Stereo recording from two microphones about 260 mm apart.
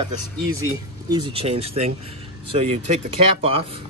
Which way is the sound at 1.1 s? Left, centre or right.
Centre.